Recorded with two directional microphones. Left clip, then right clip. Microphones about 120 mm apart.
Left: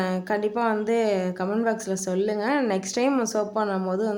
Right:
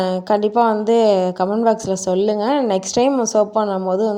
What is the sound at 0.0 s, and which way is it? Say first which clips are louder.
A woman's voice: right 8 dB; 45° right (ahead or behind).